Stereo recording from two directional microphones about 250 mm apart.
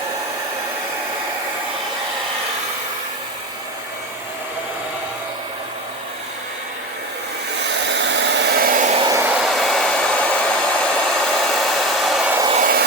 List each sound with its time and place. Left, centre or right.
7.7 s hair dryer: right
9.0 s hair dryer: centre
12.5 s vehicle: right